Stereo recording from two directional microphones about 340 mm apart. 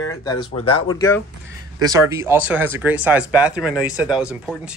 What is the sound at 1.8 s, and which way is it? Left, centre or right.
Speech, centre.